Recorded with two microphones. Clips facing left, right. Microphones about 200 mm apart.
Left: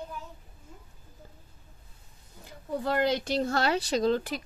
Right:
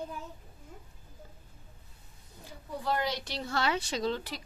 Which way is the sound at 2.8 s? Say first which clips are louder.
Left 5 dB; 55° left (ahead or behind).